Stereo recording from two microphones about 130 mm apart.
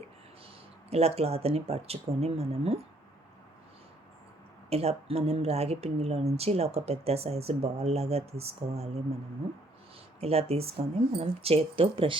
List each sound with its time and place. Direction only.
0.9 s speech: 50° right (ahead or behind)
4.7 s speech: 50° right (ahead or behind)
10.2 s speech: 50° right (ahead or behind)